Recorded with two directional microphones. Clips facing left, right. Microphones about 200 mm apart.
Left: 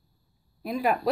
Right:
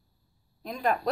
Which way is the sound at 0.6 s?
5° left (ahead or behind).